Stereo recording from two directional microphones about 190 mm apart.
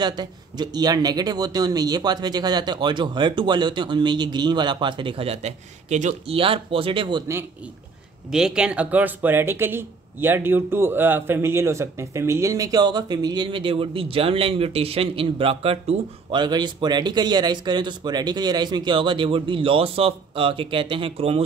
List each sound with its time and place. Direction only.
0.0 s speech: 20° right (ahead or behind)
8.3 s speech: 5° right (ahead or behind); by 21.4 s 30° right (ahead or behind)